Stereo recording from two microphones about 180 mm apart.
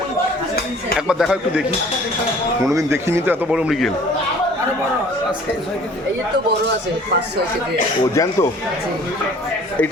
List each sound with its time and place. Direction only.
0.9 s speech: 5° right (ahead or behind)
2.6 s speech: 15° right (ahead or behind); by 3.9 s centre (ahead or behind)
8.1 s speech: 15° left (ahead or behind)